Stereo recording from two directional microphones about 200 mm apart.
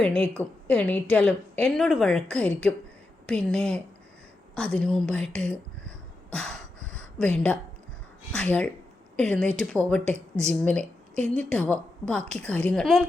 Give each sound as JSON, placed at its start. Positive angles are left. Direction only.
{"t": 0.0, "sound": "a woman's voice", "side_deg": 5}
{"t": 6.3, "sound": "a sound", "side_deg": 5}
{"t": 8.3, "sound": "a woman's voice", "side_deg": 5}